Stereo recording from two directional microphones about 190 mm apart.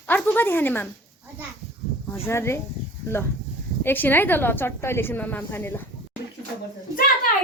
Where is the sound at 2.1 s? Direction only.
15° left (ahead or behind).